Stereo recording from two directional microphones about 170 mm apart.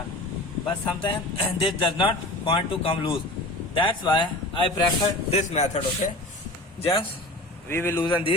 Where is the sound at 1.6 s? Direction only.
30° left (ahead or behind).